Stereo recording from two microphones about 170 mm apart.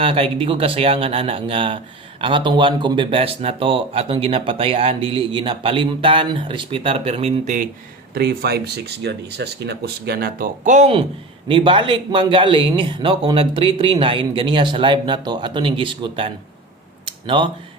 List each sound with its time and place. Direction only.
0.0 s speech: 35° right (ahead or behind)
8.1 s speech: 65° right (ahead or behind); by 10.9 s 45° right (ahead or behind)
11.4 s a man's voice: 30° right (ahead or behind)
17.1 s a sound: 30° right (ahead or behind)